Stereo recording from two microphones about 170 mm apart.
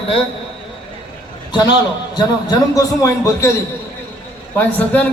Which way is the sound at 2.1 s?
20° left (ahead or behind).